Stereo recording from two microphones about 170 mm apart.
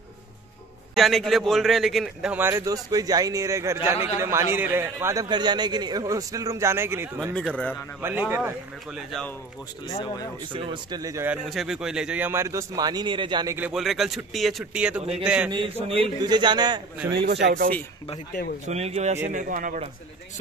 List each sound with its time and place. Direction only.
0.9 s a man's voice: centre (ahead or behind)
2.3 s a man's voice: 15° right (ahead or behind)
7.3 s a man's voice: 5° left (ahead or behind)
8.0 s a man's voice: 10° right (ahead or behind)
9.8 s speech: 25° left (ahead or behind)
10.4 s a man's voice: 30° right (ahead or behind)
11.2 s a man's voice: centre (ahead or behind); by 13.6 s 25° right (ahead or behind)
13.6 s a man's voice: 5° right (ahead or behind)
15.5 s a man's voice: 30° right (ahead or behind)
17.1 s speech: 75° right (ahead or behind)
18.7 s a man's voice: 40° right (ahead or behind)
19.3 s a man's voice: 50° right (ahead or behind)